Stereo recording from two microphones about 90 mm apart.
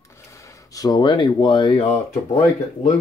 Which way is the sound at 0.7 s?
45° left (ahead or behind).